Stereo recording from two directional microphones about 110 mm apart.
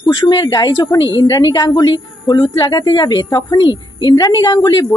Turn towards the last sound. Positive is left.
turn(degrees=35)  # may be behind; listen again after turning